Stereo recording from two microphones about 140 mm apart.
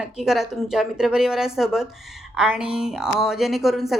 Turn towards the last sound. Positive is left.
turn(degrees=0)  # may be behind; listen again after turning